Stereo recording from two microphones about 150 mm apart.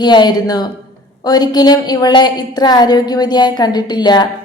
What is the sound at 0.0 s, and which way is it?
A woman's voice, 30° left (ahead or behind).